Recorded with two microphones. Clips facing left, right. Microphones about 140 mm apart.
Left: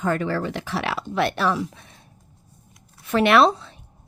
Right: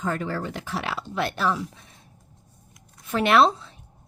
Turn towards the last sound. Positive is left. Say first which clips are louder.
# left 2 dB
turn(degrees=70)  # may be behind; listen again after turning